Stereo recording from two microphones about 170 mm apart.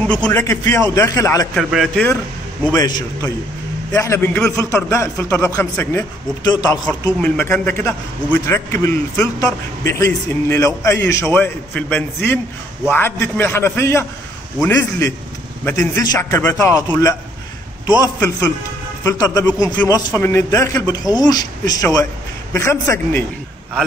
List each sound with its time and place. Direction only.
0.0 s a man's voice: 5° left (ahead or behind)
1.5 s speech: centre (ahead or behind)
2.7 s a man's voice: 20° left (ahead or behind)
7.2 s a man's voice: 10° left (ahead or behind)